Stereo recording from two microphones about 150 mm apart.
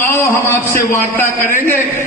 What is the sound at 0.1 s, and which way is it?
A man's voice, 15° left (ahead or behind).